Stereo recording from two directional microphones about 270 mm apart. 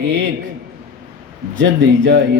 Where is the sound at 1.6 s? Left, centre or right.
Right.